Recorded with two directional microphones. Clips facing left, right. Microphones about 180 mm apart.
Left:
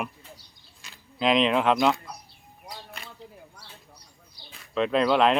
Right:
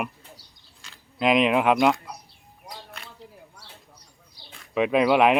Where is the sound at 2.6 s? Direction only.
Centre (ahead or behind).